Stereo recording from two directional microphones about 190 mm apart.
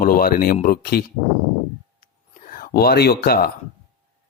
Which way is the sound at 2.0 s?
45° left (ahead or behind).